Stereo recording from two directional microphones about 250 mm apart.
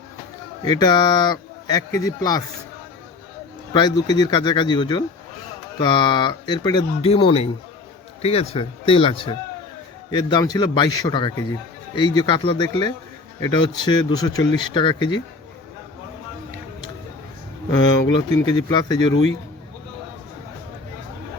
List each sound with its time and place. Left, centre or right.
0.6 s speech: centre
3.7 s speech: centre
17.7 s speech: centre